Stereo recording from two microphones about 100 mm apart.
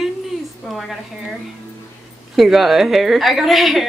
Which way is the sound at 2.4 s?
Centre (ahead or behind).